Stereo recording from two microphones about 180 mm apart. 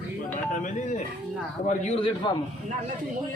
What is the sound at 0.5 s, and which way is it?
A man's voice, 45° left (ahead or behind).